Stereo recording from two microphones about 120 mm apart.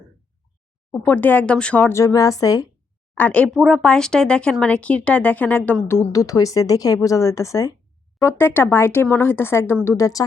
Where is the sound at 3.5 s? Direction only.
Centre (ahead or behind).